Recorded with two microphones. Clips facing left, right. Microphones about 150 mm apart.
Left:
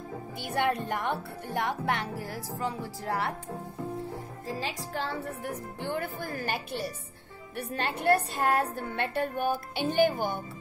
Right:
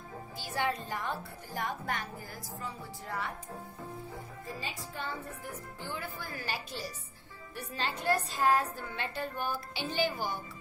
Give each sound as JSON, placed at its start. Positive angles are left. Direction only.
{"t": 0.4, "sound": "speech", "side_deg": 60}
{"t": 4.5, "sound": "speech", "side_deg": 90}